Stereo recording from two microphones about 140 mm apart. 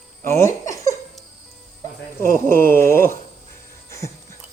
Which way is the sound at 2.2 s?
85° right.